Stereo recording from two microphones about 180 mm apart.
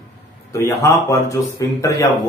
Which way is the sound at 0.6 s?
15° left (ahead or behind).